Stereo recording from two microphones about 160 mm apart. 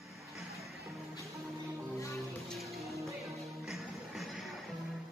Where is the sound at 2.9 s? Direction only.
Centre (ahead or behind).